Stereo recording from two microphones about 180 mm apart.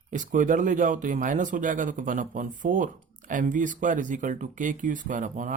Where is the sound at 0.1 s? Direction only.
45° right (ahead or behind).